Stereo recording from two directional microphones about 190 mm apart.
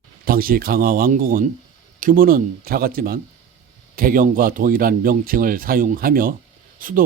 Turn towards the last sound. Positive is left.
turn(degrees=-45)  # may be behind; listen again after turning